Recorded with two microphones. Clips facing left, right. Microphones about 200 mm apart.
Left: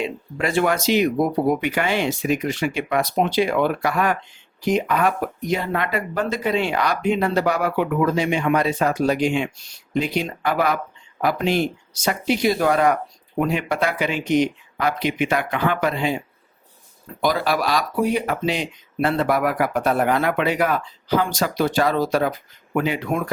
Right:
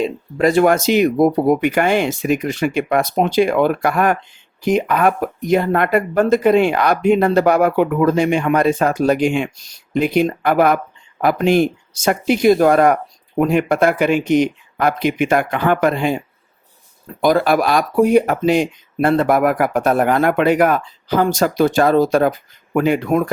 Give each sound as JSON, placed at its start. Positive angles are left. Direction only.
{"t": 0.0, "sound": "speech", "side_deg": -40}